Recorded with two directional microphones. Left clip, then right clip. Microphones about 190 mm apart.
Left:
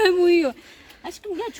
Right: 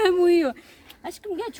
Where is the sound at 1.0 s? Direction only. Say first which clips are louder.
Left 1 dB; 5° right (ahead or behind).